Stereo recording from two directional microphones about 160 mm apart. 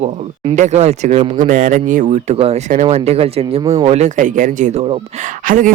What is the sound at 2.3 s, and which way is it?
Speech, 40° right (ahead or behind).